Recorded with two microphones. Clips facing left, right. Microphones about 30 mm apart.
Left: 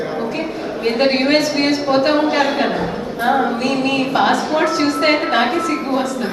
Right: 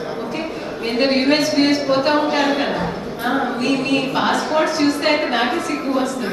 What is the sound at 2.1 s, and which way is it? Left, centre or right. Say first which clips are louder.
Speech: left 1 dB; centre.